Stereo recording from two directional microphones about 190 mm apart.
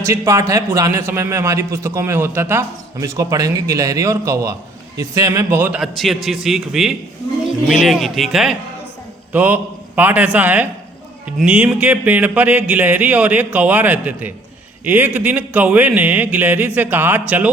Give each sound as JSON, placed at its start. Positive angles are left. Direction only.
{"t": 0.0, "sound": "a man's voice", "side_deg": -15}